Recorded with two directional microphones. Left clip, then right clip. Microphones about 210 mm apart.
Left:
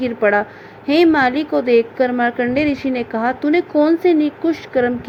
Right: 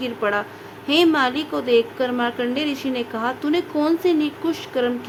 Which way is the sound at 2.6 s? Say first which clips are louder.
Left 6 dB; 5° right (ahead or behind).